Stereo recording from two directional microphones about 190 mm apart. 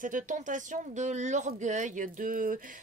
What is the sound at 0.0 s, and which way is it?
Speech, 45° right (ahead or behind).